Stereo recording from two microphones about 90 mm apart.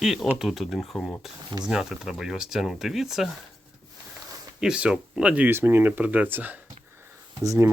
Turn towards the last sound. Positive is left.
turn(degrees=-35)  # may be behind; listen again after turning